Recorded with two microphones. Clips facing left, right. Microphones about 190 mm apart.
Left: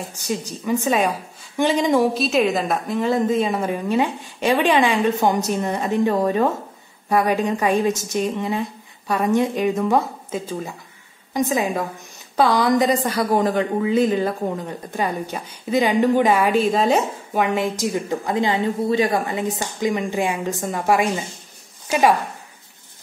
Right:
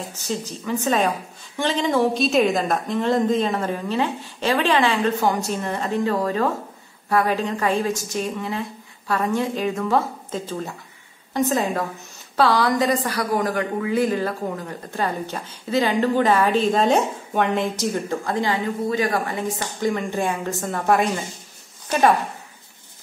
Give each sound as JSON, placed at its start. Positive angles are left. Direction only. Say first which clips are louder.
{"t": 0.2, "sound": "a woman's voice", "louder": "left 2 dB", "side_deg": 15}
{"t": 2.1, "sound": "a woman's voice", "louder": "even", "side_deg": 0}